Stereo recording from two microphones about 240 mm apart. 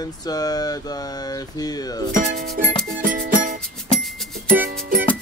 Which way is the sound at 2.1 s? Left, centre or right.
Right.